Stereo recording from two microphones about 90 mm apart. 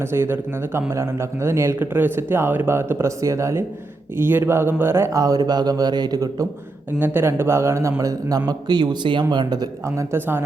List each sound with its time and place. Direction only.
0.0 s a man's voice: 30° right (ahead or behind)
5.1 s speech: 45° right (ahead or behind)
7.0 s a man's voice: 25° right (ahead or behind); by 9.6 s 55° right (ahead or behind)
9.8 s a man's voice: 35° right (ahead or behind)